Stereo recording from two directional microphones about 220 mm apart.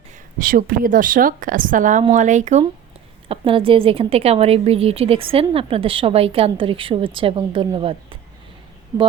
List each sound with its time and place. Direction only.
0.3 s a woman's voice: 40° right (ahead or behind); by 8.2 s 25° right (ahead or behind)